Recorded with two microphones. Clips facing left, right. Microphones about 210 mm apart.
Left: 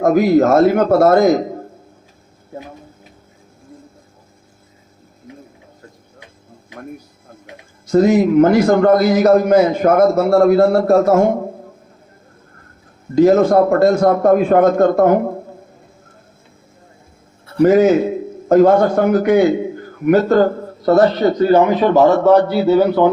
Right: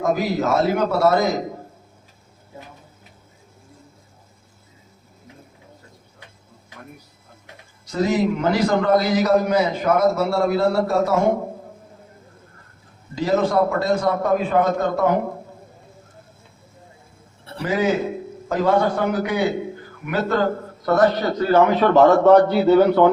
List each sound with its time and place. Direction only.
0.0 s a man's voice: 50° left (ahead or behind)
7.9 s a man's voice: 50° left (ahead or behind)
13.1 s a man's voice: 45° left (ahead or behind)
17.6 s a man's voice: 45° left (ahead or behind); by 23.0 s 5° left (ahead or behind)